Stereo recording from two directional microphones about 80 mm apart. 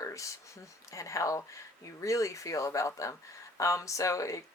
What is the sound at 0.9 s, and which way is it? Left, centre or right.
Speech, left.